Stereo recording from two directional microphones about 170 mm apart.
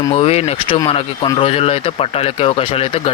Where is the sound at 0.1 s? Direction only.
35° left (ahead or behind).